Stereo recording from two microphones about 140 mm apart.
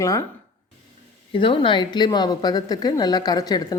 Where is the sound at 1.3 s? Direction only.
40° left (ahead or behind).